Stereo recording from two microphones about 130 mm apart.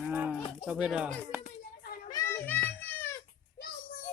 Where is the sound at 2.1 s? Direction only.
20° left (ahead or behind).